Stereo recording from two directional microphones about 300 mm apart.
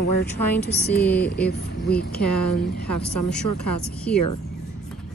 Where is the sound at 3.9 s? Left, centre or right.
Centre.